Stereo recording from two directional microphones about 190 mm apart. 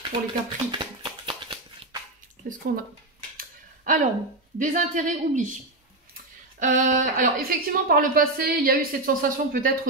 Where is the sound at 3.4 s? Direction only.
45° right (ahead or behind).